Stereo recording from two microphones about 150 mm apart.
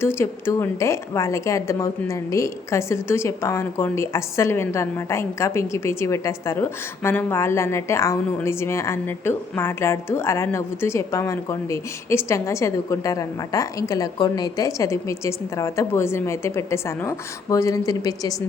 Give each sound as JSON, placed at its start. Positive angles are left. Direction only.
{"t": 0.0, "sound": "a woman's voice", "side_deg": 15}